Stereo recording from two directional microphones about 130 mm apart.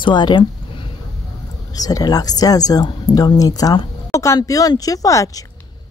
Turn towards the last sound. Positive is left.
turn(degrees=25)  # may be behind; listen again after turning